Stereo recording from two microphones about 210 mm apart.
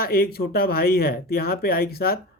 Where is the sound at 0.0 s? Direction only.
45° left (ahead or behind).